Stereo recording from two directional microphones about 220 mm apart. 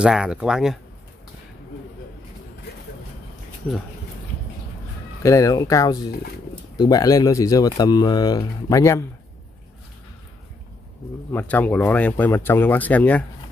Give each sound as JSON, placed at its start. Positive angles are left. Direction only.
{"t": 0.0, "sound": "speech", "side_deg": -5}
{"t": 5.2, "sound": "speech", "side_deg": 15}
{"t": 11.3, "sound": "speech", "side_deg": 5}